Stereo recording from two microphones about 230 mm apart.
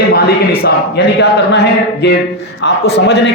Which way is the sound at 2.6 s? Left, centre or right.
Left.